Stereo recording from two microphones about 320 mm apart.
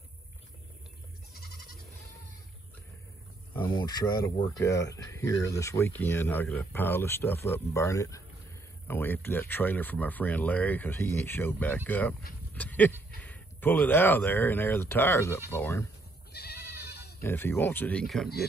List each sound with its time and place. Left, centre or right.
1.3 s goat: left
3.5 s speech: centre
16.3 s goat: left
17.2 s speech: centre